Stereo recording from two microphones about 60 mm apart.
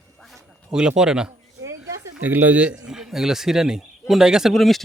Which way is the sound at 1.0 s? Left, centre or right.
Centre.